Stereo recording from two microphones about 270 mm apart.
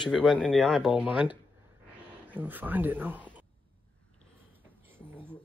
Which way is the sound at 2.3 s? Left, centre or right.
Centre.